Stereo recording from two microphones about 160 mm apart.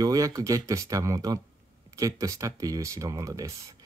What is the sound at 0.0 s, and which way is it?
Speech, 20° right (ahead or behind).